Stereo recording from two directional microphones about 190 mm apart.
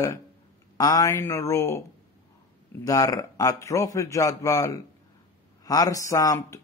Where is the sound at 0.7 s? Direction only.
20° left (ahead or behind).